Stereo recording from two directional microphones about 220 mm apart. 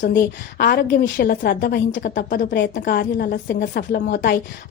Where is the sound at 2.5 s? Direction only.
50° left (ahead or behind).